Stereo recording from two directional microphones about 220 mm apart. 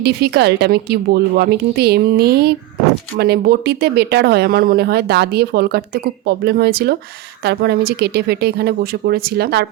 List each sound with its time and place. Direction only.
0.0 s speech: 50° right (ahead or behind)